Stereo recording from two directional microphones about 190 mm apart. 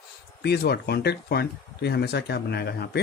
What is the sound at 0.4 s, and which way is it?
Speech, 60° left (ahead or behind).